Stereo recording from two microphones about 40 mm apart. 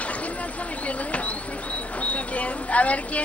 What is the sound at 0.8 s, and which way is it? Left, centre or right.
A man's voice, left.